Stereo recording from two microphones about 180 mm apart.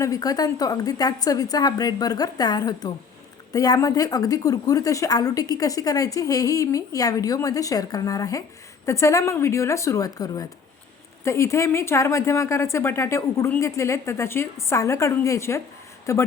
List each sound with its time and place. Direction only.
0.0 s a woman's voice: 20° left (ahead or behind)